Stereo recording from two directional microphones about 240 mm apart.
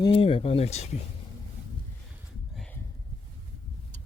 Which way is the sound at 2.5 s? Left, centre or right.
Centre.